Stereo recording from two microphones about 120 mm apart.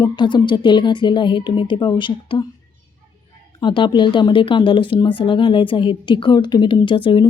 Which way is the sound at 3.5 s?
40° left (ahead or behind).